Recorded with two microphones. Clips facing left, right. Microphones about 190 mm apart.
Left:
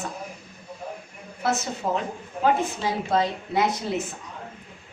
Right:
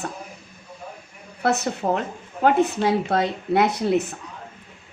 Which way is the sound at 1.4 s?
60° right (ahead or behind).